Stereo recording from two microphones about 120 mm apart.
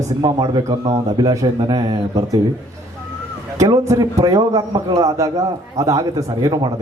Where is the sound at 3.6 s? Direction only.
30° right (ahead or behind).